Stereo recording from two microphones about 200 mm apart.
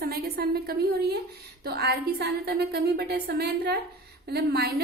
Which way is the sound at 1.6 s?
55° right (ahead or behind).